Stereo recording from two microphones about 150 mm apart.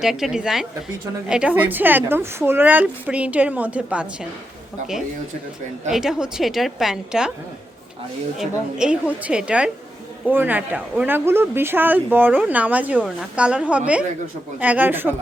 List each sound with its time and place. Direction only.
0.0 s a woman's voice: 5° right (ahead or behind)
5.9 s a woman's voice: 5° right (ahead or behind)
8.4 s speech: 5° right (ahead or behind)